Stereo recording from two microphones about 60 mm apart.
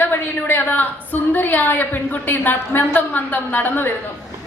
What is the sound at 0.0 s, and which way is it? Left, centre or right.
A woman's voice, left.